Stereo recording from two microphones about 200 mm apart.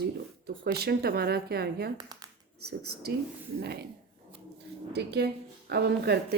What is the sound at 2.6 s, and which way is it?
A woman's voice, 55° right (ahead or behind).